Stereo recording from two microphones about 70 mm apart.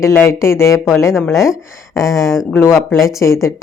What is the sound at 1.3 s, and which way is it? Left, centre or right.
Speech, centre.